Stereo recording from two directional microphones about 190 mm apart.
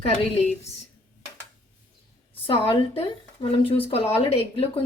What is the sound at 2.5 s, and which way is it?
Speech, 30° left (ahead or behind).